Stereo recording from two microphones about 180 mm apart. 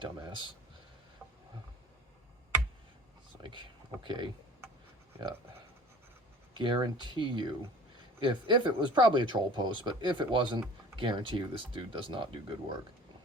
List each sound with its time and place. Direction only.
0.0 s speech: 25° right (ahead or behind)
3.4 s speech: 25° right (ahead or behind)
6.5 s speech: 25° right (ahead or behind)